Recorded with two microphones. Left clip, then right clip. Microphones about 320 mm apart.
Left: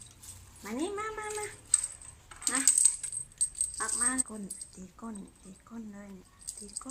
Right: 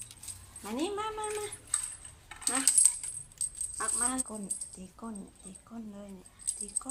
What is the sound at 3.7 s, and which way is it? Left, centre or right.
Speech, centre.